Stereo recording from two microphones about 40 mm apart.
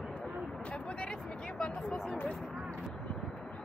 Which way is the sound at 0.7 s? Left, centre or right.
Left.